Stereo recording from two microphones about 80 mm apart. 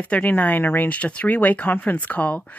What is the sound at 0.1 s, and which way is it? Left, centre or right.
Speech, left.